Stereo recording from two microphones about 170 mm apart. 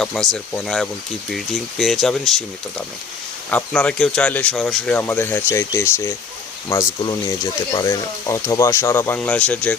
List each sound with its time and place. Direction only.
0.0 s speech: centre (ahead or behind)